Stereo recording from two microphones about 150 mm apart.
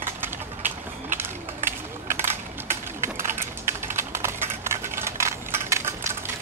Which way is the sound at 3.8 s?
15° right (ahead or behind).